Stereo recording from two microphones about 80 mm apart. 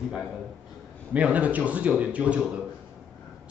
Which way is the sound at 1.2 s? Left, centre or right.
Centre.